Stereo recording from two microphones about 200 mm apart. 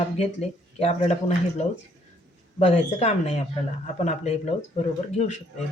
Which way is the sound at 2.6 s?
35° left (ahead or behind).